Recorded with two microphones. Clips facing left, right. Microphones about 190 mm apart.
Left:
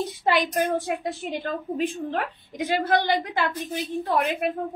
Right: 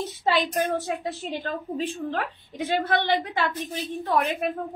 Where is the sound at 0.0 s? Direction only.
10° left (ahead or behind).